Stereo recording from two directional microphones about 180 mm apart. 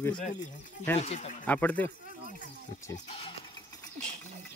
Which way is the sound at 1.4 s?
10° left (ahead or behind).